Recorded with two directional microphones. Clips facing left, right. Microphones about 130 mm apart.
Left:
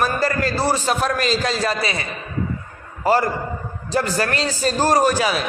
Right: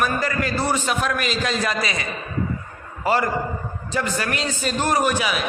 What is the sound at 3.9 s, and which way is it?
A man's voice, 35° left (ahead or behind).